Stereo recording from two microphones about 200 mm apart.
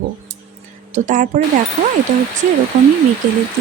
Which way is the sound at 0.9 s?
40° right (ahead or behind).